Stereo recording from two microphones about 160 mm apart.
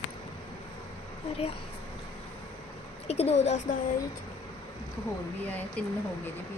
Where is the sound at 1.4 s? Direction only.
40° left (ahead or behind).